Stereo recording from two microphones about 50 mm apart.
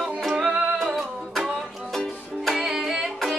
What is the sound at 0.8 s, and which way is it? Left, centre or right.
Music, centre.